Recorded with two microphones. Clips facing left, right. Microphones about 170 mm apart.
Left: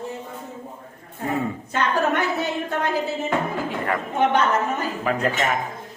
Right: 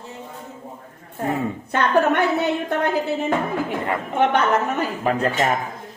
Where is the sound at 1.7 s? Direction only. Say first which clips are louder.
Right 4 dB; 60° right (ahead or behind).